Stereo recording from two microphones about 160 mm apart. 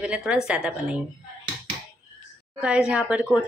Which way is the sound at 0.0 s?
5° right (ahead or behind).